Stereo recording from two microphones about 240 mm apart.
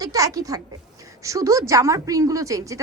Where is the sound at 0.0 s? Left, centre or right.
Centre.